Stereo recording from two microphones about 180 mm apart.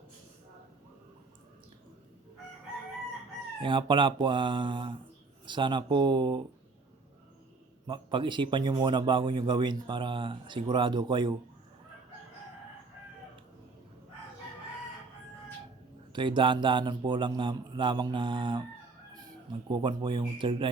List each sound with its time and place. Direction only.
3.6 s a man's voice: 25° right (ahead or behind)
7.9 s a man's voice: 25° right (ahead or behind)
16.1 s a man's voice: 25° right (ahead or behind)
19.6 s a man's voice: 25° right (ahead or behind)